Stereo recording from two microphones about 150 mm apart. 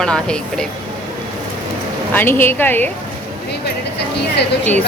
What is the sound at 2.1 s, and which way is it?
Speech, 15° left (ahead or behind).